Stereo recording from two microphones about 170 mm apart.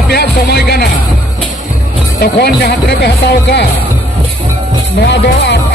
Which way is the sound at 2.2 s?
70° left (ahead or behind).